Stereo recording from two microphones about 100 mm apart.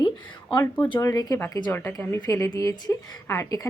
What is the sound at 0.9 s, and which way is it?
Speech, 40° left (ahead or behind).